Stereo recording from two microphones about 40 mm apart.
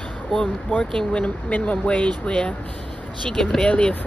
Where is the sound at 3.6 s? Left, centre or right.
Left.